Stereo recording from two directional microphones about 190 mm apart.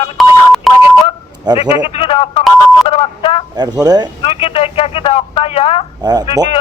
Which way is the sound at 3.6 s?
20° right (ahead or behind).